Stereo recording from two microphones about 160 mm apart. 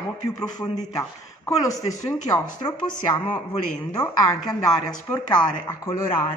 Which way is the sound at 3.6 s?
10° left (ahead or behind).